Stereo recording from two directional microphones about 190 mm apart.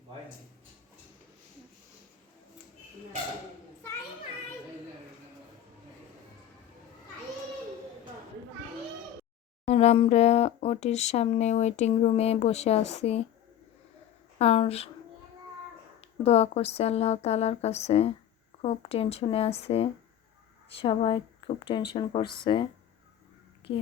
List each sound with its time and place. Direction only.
9.6 s speech: 35° left (ahead or behind)
14.3 s speech: 30° left (ahead or behind)
16.0 s speech: 35° left (ahead or behind)
23.6 s a child's voice: 30° left (ahead or behind)